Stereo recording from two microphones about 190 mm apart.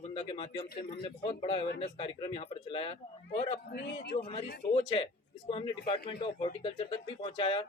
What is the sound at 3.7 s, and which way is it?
Speech, 60° left (ahead or behind).